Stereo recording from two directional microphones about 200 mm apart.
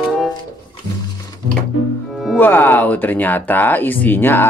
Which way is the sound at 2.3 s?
10° left (ahead or behind).